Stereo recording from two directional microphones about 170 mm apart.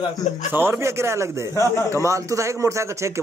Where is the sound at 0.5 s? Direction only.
15° right (ahead or behind).